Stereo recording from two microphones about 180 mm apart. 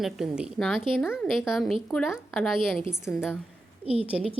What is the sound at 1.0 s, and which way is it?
Speech, 10° left (ahead or behind).